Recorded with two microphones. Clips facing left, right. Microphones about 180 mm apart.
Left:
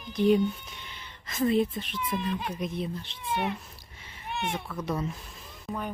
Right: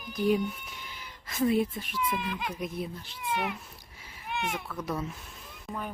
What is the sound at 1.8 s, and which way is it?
Speech, 25° left (ahead or behind).